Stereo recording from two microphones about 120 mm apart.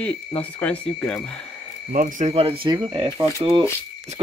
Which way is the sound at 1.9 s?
90° right.